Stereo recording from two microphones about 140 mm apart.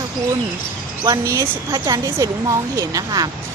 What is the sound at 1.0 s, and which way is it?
A woman's voice, 20° right (ahead or behind).